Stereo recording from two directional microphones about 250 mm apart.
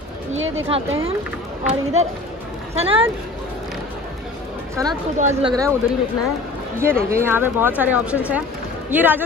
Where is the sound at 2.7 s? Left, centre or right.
Right.